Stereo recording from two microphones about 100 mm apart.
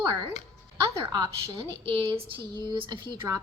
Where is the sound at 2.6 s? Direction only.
50° right (ahead or behind).